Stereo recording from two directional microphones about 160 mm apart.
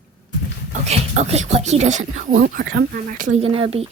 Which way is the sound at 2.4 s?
75° right (ahead or behind).